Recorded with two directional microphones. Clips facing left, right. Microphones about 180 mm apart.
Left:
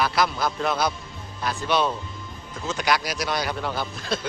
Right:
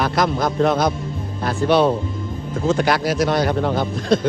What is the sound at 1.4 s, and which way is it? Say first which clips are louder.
Speech: right 7 dB; 50° right (ahead or behind).